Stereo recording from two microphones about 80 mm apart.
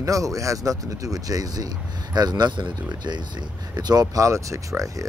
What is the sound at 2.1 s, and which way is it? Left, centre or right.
Speech, right.